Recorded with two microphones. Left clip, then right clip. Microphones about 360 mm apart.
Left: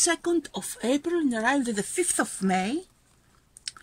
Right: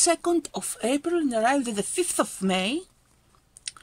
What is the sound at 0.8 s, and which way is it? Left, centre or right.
Speech, right.